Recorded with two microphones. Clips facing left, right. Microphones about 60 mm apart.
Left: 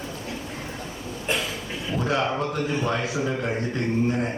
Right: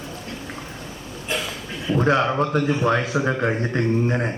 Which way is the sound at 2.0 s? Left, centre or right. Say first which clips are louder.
Right 5 dB; right.